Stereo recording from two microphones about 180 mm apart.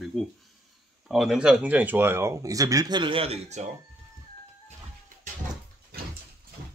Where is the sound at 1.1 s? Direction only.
Centre (ahead or behind); by 3.7 s 35° right (ahead or behind).